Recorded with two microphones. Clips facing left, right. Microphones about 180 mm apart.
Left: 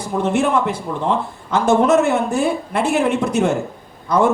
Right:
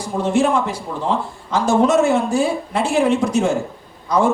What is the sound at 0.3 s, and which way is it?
Speech, 60° left (ahead or behind).